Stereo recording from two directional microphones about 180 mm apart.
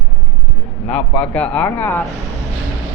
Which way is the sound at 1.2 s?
5° left (ahead or behind).